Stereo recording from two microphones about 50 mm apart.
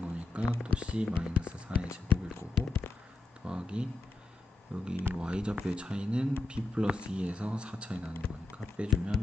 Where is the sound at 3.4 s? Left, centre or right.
Centre.